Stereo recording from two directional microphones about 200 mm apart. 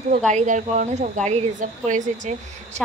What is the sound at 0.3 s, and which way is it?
A woman's voice, 40° right (ahead or behind).